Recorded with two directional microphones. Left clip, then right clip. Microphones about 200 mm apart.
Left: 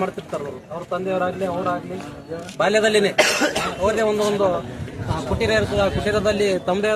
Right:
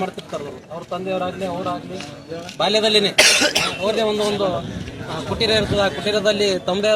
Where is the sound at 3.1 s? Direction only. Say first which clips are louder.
Right 4 dB; 30° left (ahead or behind).